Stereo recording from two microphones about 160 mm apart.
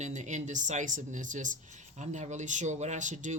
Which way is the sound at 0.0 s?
50° right (ahead or behind).